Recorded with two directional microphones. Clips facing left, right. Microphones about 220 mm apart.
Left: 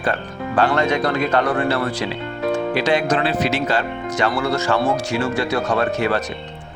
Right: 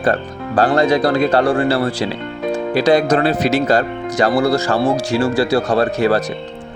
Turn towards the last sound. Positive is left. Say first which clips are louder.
# right 4 dB
turn(degrees=-35)  # may be behind; listen again after turning